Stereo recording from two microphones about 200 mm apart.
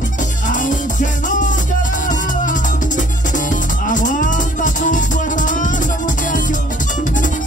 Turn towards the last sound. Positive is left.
turn(degrees=40)  # may be behind; listen again after turning